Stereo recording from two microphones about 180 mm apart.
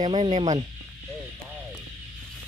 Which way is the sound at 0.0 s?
30° right (ahead or behind).